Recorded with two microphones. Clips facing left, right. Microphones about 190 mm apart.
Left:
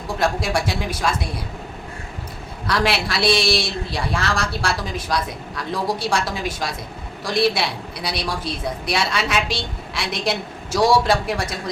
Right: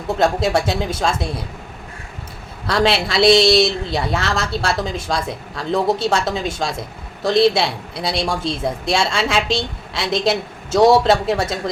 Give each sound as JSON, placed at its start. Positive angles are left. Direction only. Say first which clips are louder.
{"t": 0.2, "sound": "a man's voice", "louder": "right 4 dB", "side_deg": -25}
{"t": 2.6, "sound": "a man's voice", "louder": "right 4 dB", "side_deg": -25}